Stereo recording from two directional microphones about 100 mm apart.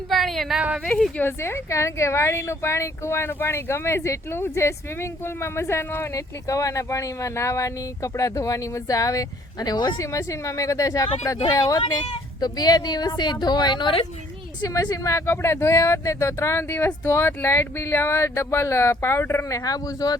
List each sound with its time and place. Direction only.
0.1 s speech: centre (ahead or behind)
1.2 s speech: 25° left (ahead or behind); by 10.1 s 40° left (ahead or behind)
10.1 s a woman's voice: 30° left (ahead or behind); by 14.0 s 50° left (ahead or behind)
14.7 s speech: 35° left (ahead or behind)